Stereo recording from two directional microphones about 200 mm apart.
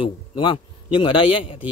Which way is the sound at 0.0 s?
25° left (ahead or behind).